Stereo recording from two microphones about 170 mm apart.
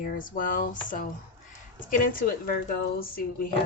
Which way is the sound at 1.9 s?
55° left (ahead or behind).